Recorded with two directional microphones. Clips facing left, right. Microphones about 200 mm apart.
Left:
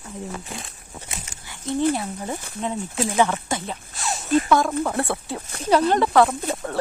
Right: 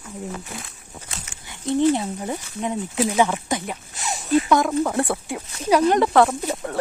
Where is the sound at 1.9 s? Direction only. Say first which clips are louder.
Right 3 dB; 20° right (ahead or behind).